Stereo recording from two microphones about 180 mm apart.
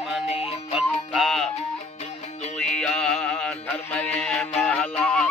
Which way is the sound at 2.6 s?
5° left (ahead or behind).